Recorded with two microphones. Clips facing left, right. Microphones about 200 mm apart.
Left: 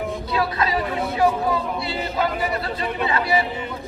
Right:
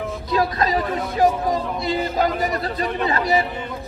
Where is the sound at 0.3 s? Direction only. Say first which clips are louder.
Right 4 dB; 40° right (ahead or behind).